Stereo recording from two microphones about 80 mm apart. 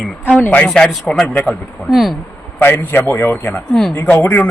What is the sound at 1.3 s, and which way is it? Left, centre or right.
Speech, centre.